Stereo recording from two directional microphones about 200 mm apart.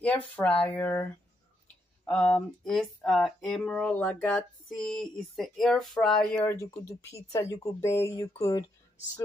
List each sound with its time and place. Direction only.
0.0 s speech: 5° left (ahead or behind)
2.0 s a sound: 5° left (ahead or behind)
8.4 s speech: 15° left (ahead or behind)